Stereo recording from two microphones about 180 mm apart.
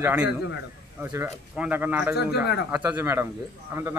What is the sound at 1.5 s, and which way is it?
Speech, 10° right (ahead or behind).